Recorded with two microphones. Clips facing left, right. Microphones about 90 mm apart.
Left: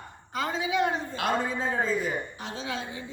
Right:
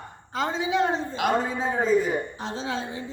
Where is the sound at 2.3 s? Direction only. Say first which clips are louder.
Right 4 dB; 30° right (ahead or behind).